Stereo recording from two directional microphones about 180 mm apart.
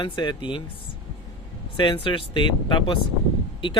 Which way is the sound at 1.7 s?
25° left (ahead or behind).